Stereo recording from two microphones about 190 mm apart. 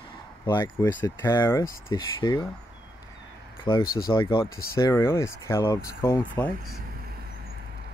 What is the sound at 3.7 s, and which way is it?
Speech, 25° left (ahead or behind).